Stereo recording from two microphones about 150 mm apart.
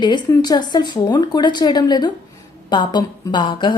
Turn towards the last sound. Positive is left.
turn(degrees=30)  # may be behind; listen again after turning